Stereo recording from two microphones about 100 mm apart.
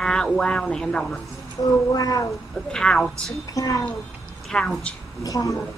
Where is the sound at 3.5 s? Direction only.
35° left (ahead or behind).